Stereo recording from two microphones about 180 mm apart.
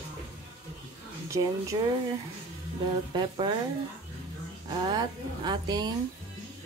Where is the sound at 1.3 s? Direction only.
15° right (ahead or behind).